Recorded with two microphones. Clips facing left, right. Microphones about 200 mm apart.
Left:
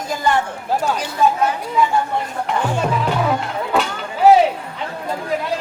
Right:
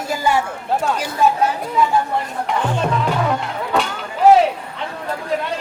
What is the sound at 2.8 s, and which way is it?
Music, 5° left (ahead or behind).